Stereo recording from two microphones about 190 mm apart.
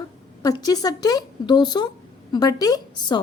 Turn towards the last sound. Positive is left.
turn(degrees=20)  # may be behind; listen again after turning